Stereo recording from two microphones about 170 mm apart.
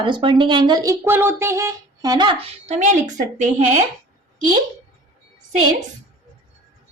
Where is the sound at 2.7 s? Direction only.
45° right (ahead or behind).